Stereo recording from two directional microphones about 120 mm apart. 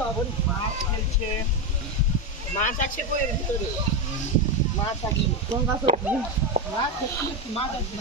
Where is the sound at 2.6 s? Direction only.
90° left.